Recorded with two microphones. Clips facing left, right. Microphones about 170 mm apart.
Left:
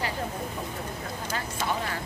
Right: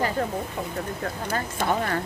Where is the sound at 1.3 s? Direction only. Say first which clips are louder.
Right 5 dB; 55° right (ahead or behind).